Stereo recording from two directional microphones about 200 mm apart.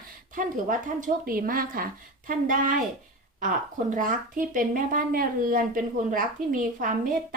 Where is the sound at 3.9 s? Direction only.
40° right (ahead or behind).